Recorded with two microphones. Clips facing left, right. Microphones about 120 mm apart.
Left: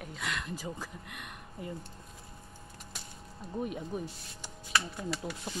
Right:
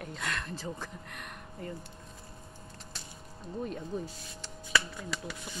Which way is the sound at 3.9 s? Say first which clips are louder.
Right 2 dB; 15° left (ahead or behind).